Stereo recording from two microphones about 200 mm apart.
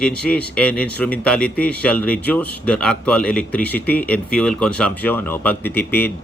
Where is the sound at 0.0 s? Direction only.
5° left (ahead or behind).